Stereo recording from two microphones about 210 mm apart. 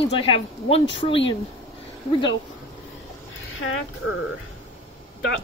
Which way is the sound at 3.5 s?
75° left (ahead or behind).